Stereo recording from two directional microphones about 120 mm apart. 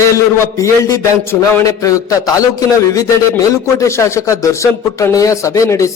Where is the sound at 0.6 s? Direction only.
25° left (ahead or behind).